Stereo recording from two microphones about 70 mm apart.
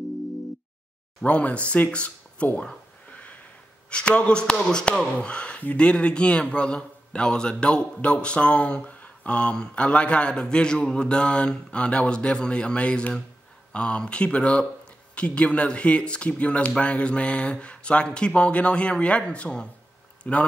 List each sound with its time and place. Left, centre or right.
1.2 s speech: centre
3.9 s a man's voice: centre